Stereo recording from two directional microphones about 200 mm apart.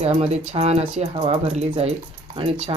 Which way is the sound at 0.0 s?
30° right (ahead or behind).